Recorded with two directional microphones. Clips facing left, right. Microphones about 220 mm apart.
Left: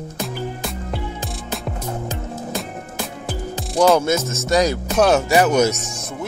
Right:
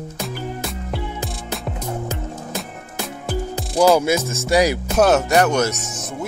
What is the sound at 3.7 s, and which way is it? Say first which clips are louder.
Speech: even; centre (ahead or behind).